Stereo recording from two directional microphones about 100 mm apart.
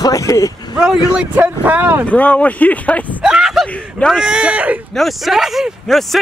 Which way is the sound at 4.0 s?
Centre (ahead or behind).